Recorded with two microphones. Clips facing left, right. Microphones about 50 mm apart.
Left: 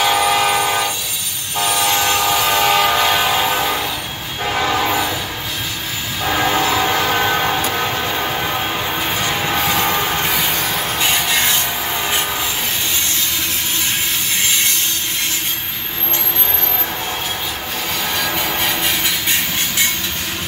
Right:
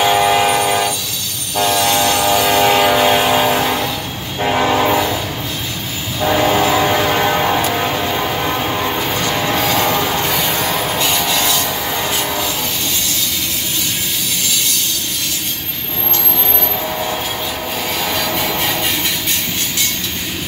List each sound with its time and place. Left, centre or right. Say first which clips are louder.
0.0 s train: right 2 dB; centre
1.7 s train: right 2 dB; centre
2.3 s train: right 3 dB; right
2.6 s vehicle: right 2 dB; centre
4.4 s train: right 4 dB; centre
6.2 s train: right 3 dB; centre
10.2 s music: right 1 dB; centre
10.5 s a sound: right 3 dB; centre
11.3 s rub: right 1 dB; left
18.1 s music: even; centre